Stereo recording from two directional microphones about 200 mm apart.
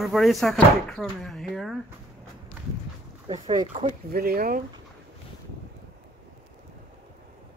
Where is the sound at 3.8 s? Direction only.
50° right (ahead or behind).